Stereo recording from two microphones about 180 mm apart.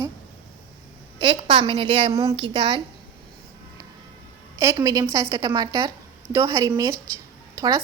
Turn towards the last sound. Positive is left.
turn(degrees=-20)  # may be behind; listen again after turning